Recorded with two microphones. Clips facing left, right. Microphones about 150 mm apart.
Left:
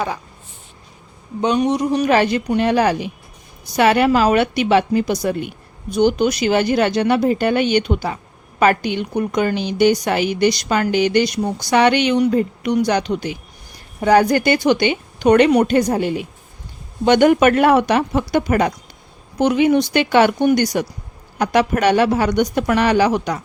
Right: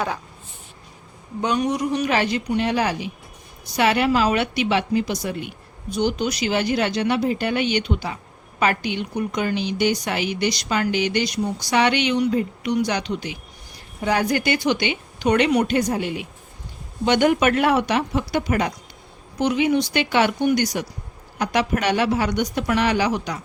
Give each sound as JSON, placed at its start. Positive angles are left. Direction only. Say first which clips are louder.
{"t": 1.4, "sound": "a woman's voice", "louder": "left 5 dB", "side_deg": 20}